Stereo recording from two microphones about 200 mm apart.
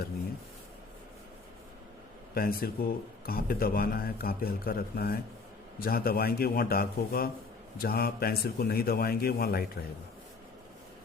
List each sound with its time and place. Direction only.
2.3 s a man's voice: 45° left (ahead or behind)